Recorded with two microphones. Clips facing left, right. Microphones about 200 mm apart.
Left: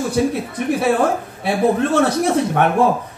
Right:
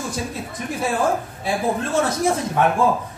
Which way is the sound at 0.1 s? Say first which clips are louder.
Left 10 dB; 65° left (ahead or behind).